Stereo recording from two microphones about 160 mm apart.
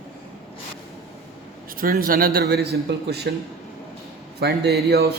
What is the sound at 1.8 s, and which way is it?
Speech, 65° right (ahead or behind).